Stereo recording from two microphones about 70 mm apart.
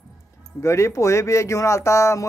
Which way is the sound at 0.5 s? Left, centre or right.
Left.